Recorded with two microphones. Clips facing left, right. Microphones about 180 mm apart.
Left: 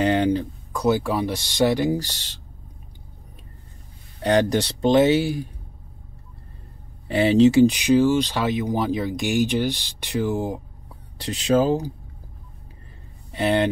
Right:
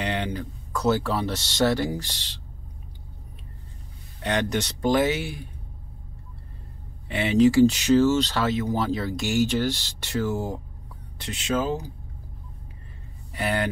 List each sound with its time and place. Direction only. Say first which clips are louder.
0.0 s a sound: left 9 dB; 45° left (ahead or behind)
0.7 s speech: left 2 dB; 15° left (ahead or behind)
2.0 s speech: left 6 dB; 45° left (ahead or behind)
4.2 s speech: left 6 dB; 35° left (ahead or behind)
7.1 s speech: left 4 dB; 35° left (ahead or behind); by 10.6 s 15° left (ahead or behind)
11.1 s speech: left 7 dB; 35° left (ahead or behind)
13.3 s speech: left 6 dB; 25° left (ahead or behind)